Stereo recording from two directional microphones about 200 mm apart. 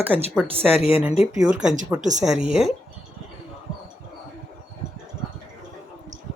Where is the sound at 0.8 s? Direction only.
30° left (ahead or behind).